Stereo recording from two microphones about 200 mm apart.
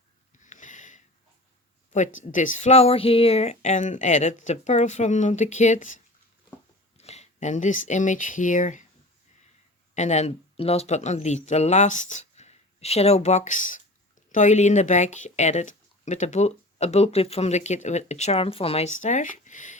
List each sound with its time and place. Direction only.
0.4 s a sound: 40° left (ahead or behind)
2.2 s speech: 40° left (ahead or behind)
9.9 s speech: 35° left (ahead or behind)